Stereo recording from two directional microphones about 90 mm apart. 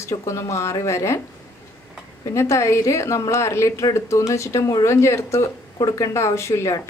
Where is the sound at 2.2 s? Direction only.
35° left (ahead or behind).